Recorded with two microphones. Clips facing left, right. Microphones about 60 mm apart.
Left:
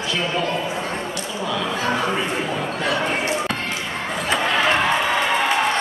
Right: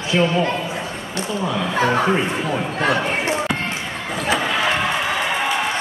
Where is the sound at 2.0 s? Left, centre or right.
Right.